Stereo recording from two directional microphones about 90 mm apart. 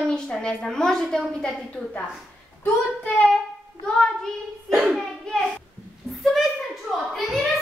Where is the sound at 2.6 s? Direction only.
15° left (ahead or behind).